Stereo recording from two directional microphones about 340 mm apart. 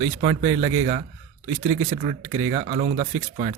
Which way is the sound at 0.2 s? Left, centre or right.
Centre.